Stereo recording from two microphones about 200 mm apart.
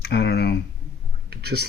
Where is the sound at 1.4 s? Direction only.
50° right (ahead or behind).